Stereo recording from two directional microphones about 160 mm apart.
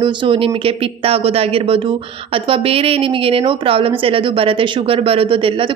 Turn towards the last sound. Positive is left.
turn(degrees=-35)  # may be behind; listen again after turning